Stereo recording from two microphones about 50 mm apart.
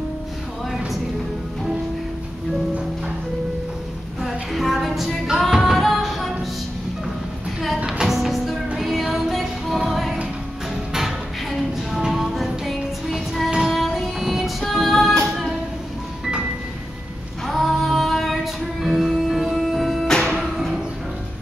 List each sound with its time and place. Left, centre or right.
4.2 s music: centre
7.8 s music: centre
17.5 s music: centre
20.5 s a sound: centre